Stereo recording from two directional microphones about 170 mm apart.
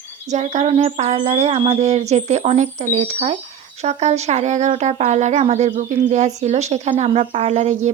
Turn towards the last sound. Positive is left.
turn(degrees=-40)  # may be behind; listen again after turning